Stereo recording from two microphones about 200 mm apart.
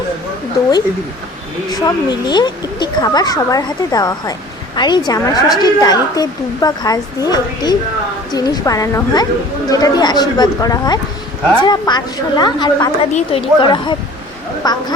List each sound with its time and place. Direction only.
1.8 s a woman's voice: 20° left (ahead or behind)